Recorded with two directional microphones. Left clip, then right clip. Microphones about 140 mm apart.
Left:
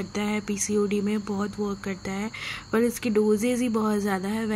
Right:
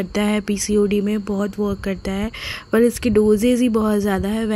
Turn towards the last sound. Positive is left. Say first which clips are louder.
# right 6 dB
turn(degrees=-25)  # may be behind; listen again after turning